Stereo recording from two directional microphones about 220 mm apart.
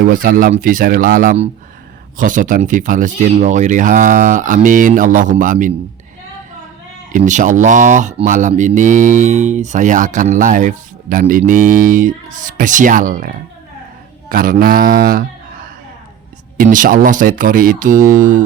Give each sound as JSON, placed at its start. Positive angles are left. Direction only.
{"t": 0.1, "sound": "speech", "side_deg": -40}
{"t": 7.1, "sound": "speech", "side_deg": -35}
{"t": 16.6, "sound": "speech", "side_deg": -40}